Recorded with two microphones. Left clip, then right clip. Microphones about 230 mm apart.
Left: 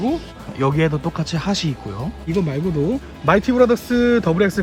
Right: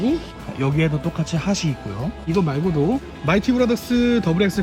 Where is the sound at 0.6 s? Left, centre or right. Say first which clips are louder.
Left 4 dB; centre.